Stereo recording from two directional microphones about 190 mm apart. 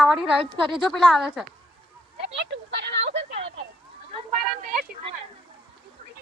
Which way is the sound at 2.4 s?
65° right (ahead or behind).